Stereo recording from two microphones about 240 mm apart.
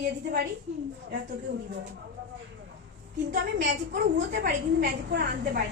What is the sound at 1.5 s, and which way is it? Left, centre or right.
Speech, right.